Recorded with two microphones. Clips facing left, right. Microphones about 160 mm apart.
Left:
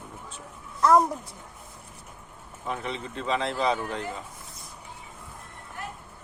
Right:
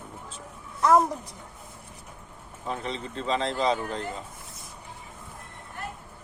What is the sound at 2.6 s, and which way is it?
Speech, 35° right (ahead or behind).